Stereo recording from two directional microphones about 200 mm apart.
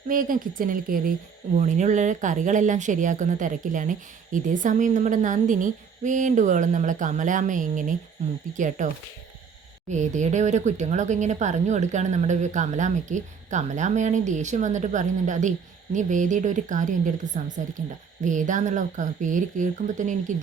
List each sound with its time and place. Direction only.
0.1 s a woman's voice: 45° right (ahead or behind)
9.9 s speech: 35° right (ahead or behind)